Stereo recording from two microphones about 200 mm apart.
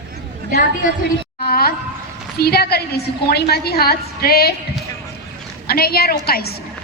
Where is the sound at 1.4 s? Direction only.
50° left (ahead or behind).